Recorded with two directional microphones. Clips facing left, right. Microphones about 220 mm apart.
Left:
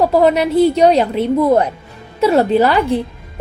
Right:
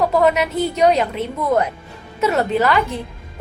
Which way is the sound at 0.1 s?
30° left (ahead or behind).